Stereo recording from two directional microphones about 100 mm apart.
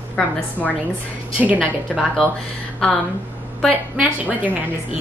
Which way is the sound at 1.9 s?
5° left (ahead or behind).